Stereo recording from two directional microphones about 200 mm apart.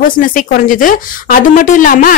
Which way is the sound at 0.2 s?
40° left (ahead or behind).